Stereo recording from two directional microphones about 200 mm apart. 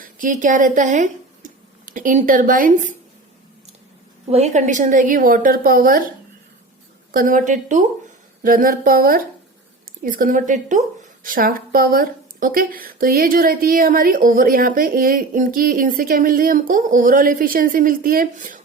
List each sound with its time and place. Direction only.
0.0 s a woman's voice: 40° right (ahead or behind)
4.3 s a woman's voice: 35° right (ahead or behind)
7.1 s a woman's voice: 45° right (ahead or behind)